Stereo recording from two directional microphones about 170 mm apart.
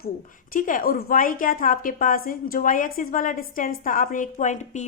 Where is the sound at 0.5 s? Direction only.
55° left (ahead or behind).